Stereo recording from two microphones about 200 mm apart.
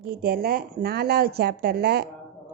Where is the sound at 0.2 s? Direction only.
50° right (ahead or behind).